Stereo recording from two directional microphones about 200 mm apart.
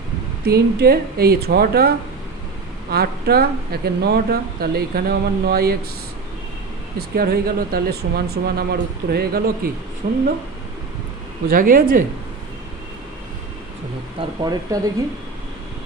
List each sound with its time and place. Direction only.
0.4 s speech: 50° right (ahead or behind)
2.9 s speech: 50° right (ahead or behind)
7.2 s speech: 50° right (ahead or behind)
11.5 s speech: 45° right (ahead or behind)
14.2 s speech: 20° right (ahead or behind)